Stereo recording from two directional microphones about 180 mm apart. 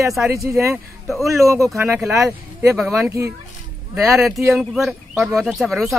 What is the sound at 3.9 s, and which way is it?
Speech, 5° right (ahead or behind).